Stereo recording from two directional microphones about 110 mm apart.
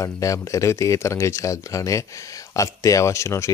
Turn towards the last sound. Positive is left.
turn(degrees=25)  # may be behind; listen again after turning